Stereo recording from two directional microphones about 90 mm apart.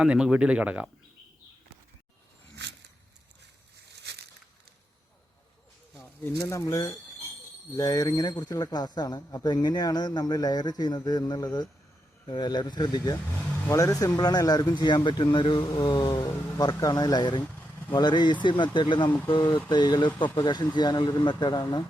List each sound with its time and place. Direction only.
0.0 s speech: 10° right (ahead or behind)
6.3 s a man's voice: 35° left (ahead or behind); by 13.1 s 50° left (ahead or behind)
13.7 s a man's voice: 40° left (ahead or behind); by 21.8 s 55° left (ahead or behind)